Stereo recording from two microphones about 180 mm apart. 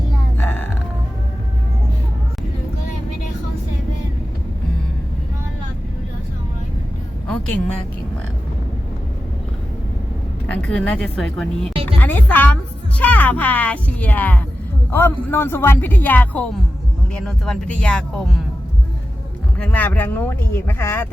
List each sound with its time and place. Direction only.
0.3 s a sound: 10° left (ahead or behind)
10.4 s speech: 10° left (ahead or behind)
11.6 s music: 30° right (ahead or behind)
11.9 s speech: 10° left (ahead or behind)
19.5 s speech: 10° left (ahead or behind)